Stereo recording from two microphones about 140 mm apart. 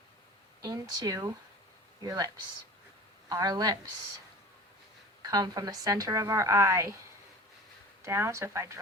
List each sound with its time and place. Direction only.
0.6 s a woman's voice: 25° right (ahead or behind)
5.2 s a woman's voice: 30° right (ahead or behind)
8.0 s a woman's voice: 20° right (ahead or behind)